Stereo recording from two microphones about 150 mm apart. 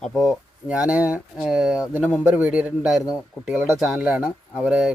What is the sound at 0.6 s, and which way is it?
Speech, 10° right (ahead or behind).